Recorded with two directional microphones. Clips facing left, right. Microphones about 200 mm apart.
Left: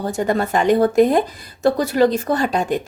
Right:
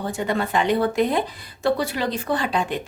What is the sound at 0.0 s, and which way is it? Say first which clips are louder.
A woman's voice: left 5 dB; 40° left (ahead or behind).